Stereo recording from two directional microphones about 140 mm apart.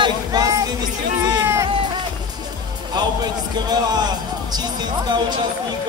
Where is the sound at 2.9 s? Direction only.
30° right (ahead or behind).